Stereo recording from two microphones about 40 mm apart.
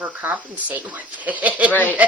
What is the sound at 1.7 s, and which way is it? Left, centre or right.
Speech, left.